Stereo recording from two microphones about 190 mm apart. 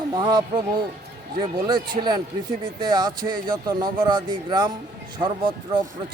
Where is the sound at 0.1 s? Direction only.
25° right (ahead or behind).